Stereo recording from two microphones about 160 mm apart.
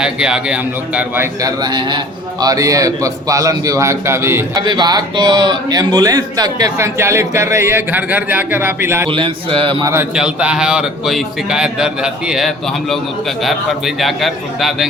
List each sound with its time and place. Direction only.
0.0 s a man's voice: 5° right (ahead or behind)
4.6 s a man's voice: 25° right (ahead or behind)
9.0 s a man's voice: 35° right (ahead or behind)
9.8 s a man's voice: 15° right (ahead or behind)
10.2 s speech: 5° right (ahead or behind)